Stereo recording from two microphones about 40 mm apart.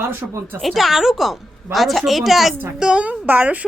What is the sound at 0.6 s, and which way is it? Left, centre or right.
Speech, centre.